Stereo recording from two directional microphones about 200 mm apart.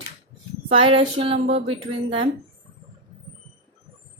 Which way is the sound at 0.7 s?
30° right (ahead or behind).